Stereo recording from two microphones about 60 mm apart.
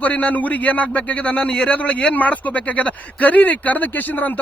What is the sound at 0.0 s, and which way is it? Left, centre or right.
Speech, left.